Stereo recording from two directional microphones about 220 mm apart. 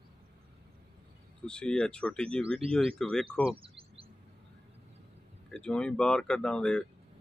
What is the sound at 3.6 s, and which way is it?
Chirp, 25° right (ahead or behind).